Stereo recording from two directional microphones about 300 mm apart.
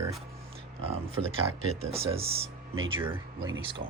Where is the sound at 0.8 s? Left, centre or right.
Centre.